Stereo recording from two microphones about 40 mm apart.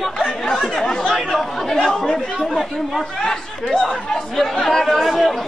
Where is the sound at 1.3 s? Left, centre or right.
Centre.